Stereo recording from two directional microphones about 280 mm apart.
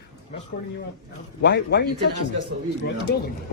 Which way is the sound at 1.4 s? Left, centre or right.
Left.